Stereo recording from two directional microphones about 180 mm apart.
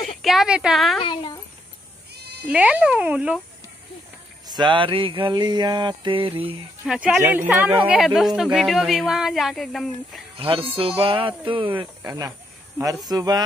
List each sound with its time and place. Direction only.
0.2 s speech: centre (ahead or behind)
1.0 s speech: 25° left (ahead or behind)
2.4 s speech: 5° right (ahead or behind)
4.5 s a sound: 25° right (ahead or behind)
6.9 s speech: centre (ahead or behind)
10.3 s a sound: 30° right (ahead or behind)